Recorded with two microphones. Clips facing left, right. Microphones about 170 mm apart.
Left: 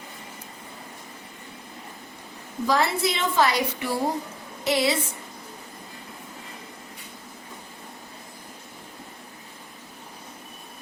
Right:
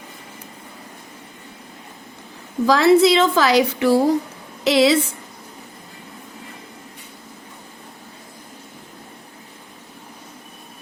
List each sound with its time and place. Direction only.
2.6 s a woman's voice: 90° right